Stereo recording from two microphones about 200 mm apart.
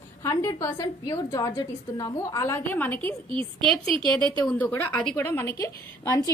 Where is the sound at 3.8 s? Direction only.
25° right (ahead or behind).